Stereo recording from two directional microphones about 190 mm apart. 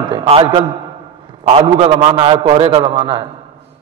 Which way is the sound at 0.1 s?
25° right (ahead or behind).